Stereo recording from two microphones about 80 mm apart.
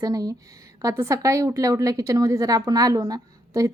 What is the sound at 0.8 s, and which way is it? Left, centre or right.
A woman's voice, right.